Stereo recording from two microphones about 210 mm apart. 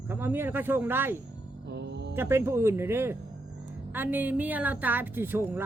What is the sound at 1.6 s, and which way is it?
Speech, 55° right (ahead or behind).